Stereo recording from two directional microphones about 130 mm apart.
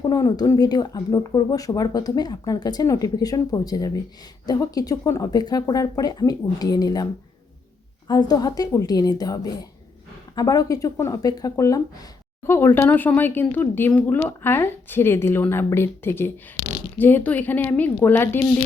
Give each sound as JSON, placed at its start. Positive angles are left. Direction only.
{"t": 0.0, "sound": "speech", "side_deg": 30}